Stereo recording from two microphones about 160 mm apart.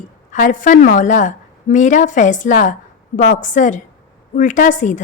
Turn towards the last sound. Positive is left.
turn(degrees=50)  # may be behind; listen again after turning